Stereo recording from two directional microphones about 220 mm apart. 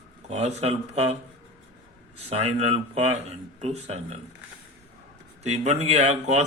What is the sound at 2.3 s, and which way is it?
A man's voice, 30° right (ahead or behind).